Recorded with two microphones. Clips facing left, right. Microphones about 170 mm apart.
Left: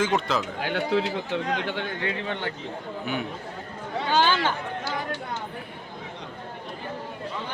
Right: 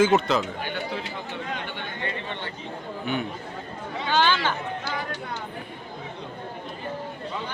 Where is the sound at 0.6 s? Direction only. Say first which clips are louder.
Left 6 dB; 90° left.